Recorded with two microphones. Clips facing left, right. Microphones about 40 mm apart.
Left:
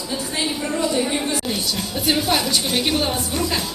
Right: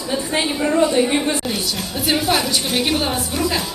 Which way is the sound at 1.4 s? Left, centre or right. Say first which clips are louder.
Right 1 dB; centre.